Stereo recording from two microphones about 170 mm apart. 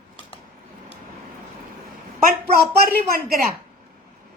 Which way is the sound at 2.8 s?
60° right (ahead or behind).